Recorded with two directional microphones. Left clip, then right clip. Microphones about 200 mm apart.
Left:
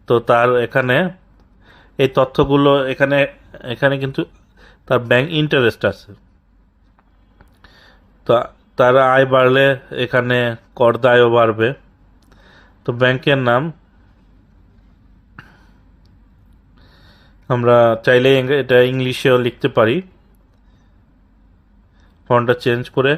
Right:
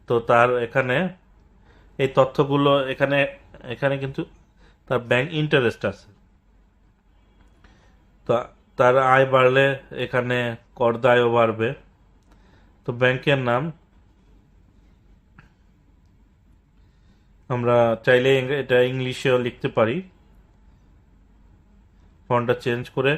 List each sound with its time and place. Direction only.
0.0 s speech: 35° left (ahead or behind)
8.2 s speech: 40° left (ahead or behind)
12.8 s speech: 40° left (ahead or behind)
17.5 s speech: 40° left (ahead or behind)
22.3 s speech: 35° left (ahead or behind)